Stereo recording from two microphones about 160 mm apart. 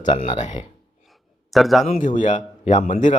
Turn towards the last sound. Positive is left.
turn(degrees=50)  # may be behind; listen again after turning